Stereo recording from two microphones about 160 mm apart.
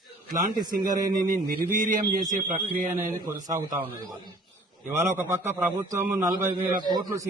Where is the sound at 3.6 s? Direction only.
15° right (ahead or behind).